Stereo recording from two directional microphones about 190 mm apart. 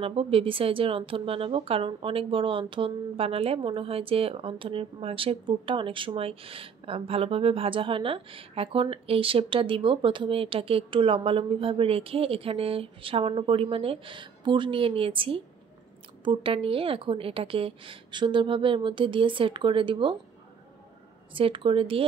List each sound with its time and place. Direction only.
0.0 s speech: 30° right (ahead or behind)
21.3 s speech: 25° right (ahead or behind)